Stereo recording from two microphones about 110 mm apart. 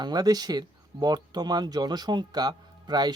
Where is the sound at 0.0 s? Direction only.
40° right (ahead or behind).